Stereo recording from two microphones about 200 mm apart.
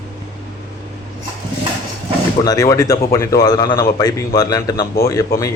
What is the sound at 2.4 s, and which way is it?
Speech, 20° left (ahead or behind).